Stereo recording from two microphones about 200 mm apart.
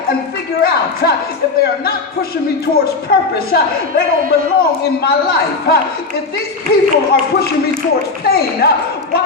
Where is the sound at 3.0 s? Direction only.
50° left (ahead or behind).